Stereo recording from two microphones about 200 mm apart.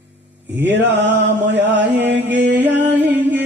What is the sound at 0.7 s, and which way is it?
Mantra, 60° right (ahead or behind).